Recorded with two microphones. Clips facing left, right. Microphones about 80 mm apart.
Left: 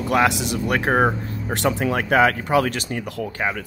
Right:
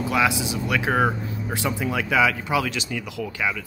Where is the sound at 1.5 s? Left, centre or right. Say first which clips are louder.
Left 5 dB; left.